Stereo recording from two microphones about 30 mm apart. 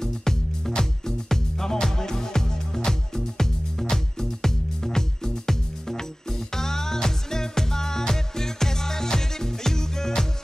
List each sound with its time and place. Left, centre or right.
0.0 s music: centre